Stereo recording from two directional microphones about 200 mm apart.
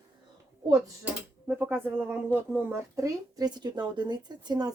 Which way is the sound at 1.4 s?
10° right (ahead or behind).